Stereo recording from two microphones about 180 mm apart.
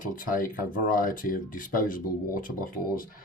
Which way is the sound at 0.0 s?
50° left (ahead or behind).